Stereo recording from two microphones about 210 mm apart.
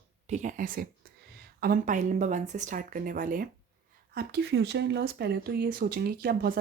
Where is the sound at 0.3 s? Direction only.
35° right (ahead or behind).